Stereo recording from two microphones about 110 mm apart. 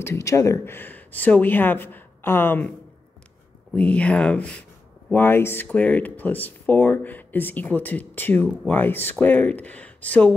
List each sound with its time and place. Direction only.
0.0 s speech: 25° left (ahead or behind)
3.7 s speech: 10° left (ahead or behind)